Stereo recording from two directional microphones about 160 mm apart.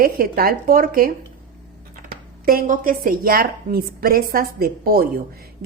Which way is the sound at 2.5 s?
60° right (ahead or behind).